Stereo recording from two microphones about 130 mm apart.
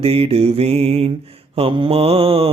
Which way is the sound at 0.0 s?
50° right (ahead or behind).